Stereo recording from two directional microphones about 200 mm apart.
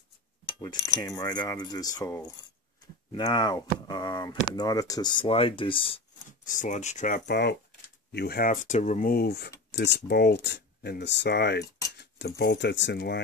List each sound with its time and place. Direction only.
0.5 s speech: 20° left (ahead or behind)
6.4 s speech: 40° left (ahead or behind); by 13.2 s 60° left (ahead or behind)